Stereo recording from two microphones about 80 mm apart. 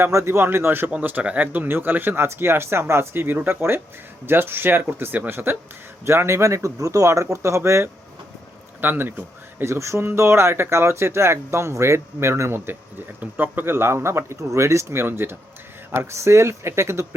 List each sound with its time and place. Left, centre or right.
0.0 s speech: right
0.9 s speech: centre; by 7.9 s right
8.8 s speech: right
9.7 s speech: right